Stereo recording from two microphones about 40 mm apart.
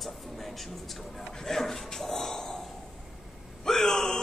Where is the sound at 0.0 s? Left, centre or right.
Centre.